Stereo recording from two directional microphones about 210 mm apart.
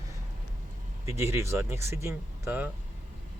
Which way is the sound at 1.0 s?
15° right (ahead or behind).